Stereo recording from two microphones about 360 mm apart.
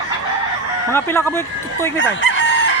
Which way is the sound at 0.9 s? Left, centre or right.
Centre.